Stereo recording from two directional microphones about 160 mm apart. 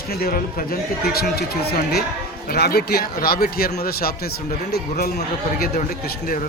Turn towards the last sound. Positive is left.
turn(degrees=65)  # may be behind; listen again after turning